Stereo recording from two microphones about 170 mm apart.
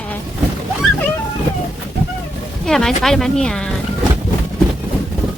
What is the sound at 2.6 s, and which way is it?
Speech, centre (ahead or behind).